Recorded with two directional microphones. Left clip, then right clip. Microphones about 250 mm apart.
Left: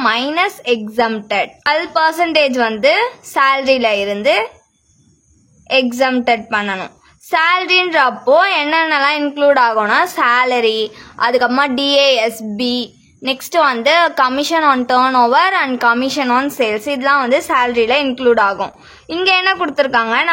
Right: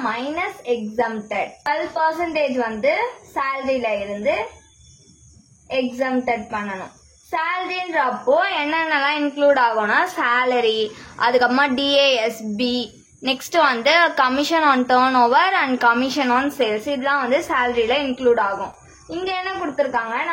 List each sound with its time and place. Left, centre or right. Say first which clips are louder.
0.0 s a woman's voice: left 9 dB; left
2.0 s a woman's voice: left 8 dB; left
5.7 s a woman's voice: left 8 dB; left